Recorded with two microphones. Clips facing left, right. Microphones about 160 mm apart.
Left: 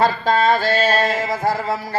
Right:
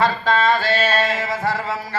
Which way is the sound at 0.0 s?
40° left (ahead or behind).